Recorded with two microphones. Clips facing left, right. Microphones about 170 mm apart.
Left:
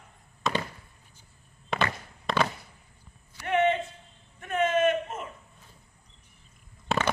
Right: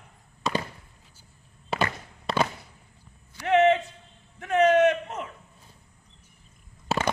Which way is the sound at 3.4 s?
90° right.